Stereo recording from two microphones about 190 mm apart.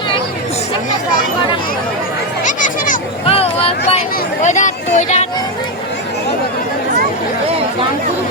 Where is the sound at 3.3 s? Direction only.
30° left (ahead or behind).